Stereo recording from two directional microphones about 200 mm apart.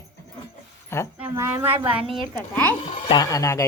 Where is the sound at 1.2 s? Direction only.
10° right (ahead or behind).